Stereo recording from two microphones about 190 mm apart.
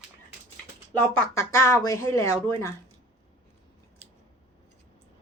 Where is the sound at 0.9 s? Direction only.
10° left (ahead or behind).